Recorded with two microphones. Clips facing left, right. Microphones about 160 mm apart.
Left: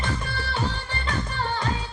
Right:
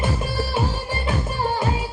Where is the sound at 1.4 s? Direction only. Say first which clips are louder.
Right 6 dB; 10° right (ahead or behind).